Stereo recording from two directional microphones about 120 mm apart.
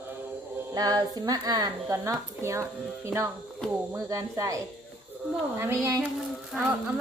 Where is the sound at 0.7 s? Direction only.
35° right (ahead or behind).